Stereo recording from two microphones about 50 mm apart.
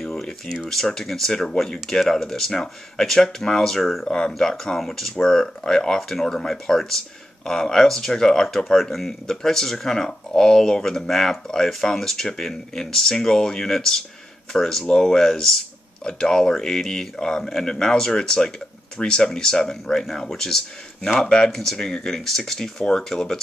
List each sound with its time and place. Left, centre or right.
0.0 s a sound: centre
0.7 s speech: centre
21.5 s speech: centre